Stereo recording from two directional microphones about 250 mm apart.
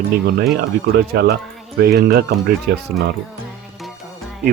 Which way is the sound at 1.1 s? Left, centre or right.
Right.